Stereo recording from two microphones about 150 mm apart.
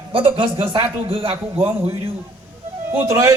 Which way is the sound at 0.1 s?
35° right (ahead or behind).